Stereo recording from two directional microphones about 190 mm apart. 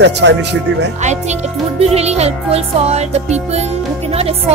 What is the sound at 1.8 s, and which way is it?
Music, 35° right (ahead or behind).